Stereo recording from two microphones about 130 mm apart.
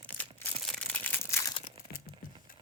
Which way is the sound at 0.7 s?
10° left (ahead or behind).